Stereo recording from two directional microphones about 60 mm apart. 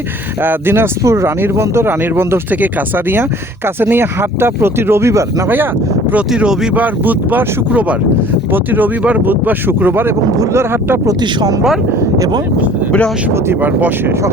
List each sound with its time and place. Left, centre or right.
0.4 s speech: right
1.0 s speech: right
3.8 s speech: right
6.3 s speech: centre
6.7 s speech: right
8.5 s speech: right